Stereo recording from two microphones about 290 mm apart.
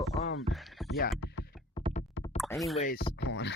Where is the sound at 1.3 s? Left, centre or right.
Left.